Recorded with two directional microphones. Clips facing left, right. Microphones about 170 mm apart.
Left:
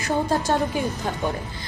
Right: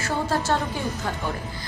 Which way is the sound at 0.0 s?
15° left (ahead or behind).